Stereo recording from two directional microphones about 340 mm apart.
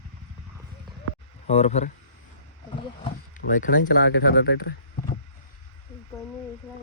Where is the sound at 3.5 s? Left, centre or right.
Left.